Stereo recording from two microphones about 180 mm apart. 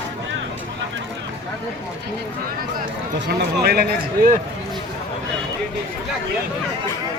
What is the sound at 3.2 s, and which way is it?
Speech, 65° right (ahead or behind).